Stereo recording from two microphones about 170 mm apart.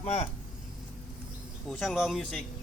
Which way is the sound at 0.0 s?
40° left (ahead or behind).